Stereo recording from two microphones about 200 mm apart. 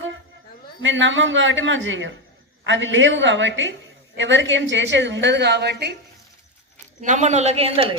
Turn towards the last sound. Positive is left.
turn(degrees=-30)  # may be behind; listen again after turning